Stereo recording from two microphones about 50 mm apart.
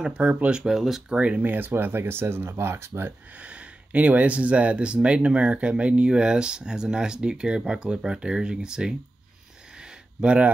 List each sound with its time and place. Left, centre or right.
0.1 s speech: right; by 1.0 s centre
1.0 s speech: right
1.4 s speech: right
3.3 s speech: right
10.2 s speech: right